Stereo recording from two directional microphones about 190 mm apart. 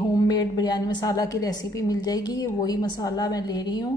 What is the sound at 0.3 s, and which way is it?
A woman's voice, 20° left (ahead or behind).